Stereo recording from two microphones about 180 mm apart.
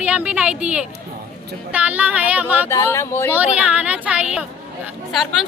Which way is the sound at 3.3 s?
10° right (ahead or behind).